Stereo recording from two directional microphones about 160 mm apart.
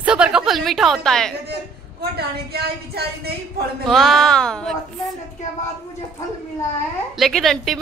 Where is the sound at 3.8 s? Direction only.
Centre (ahead or behind).